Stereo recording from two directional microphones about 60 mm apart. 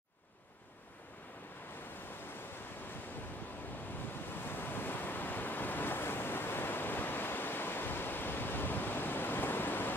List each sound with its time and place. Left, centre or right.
4.5 s waves: left